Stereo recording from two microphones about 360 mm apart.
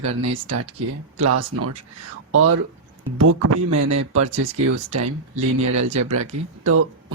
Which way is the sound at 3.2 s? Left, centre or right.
Right.